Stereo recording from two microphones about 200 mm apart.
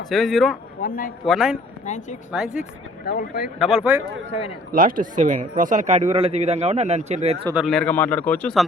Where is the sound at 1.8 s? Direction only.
35° left (ahead or behind).